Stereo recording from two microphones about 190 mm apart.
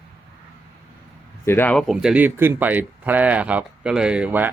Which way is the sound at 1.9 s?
5° right (ahead or behind).